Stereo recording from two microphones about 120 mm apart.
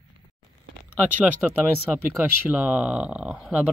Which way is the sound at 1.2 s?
15° right (ahead or behind).